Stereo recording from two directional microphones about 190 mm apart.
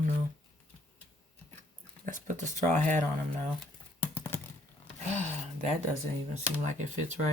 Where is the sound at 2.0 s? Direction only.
45° right (ahead or behind).